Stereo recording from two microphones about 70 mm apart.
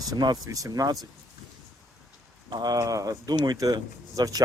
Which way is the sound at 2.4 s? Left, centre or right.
Right.